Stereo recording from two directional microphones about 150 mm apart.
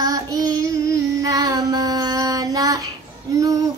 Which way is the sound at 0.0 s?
25° right (ahead or behind).